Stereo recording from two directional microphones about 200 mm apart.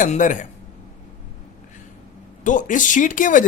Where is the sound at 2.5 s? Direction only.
40° left (ahead or behind).